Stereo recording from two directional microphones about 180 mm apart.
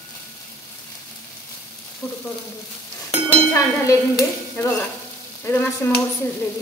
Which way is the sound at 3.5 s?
15° left (ahead or behind).